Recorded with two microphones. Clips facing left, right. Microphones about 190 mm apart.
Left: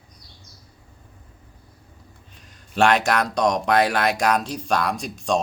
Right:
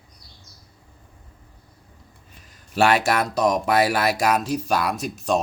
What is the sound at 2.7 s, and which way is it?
Speech, 5° right (ahead or behind).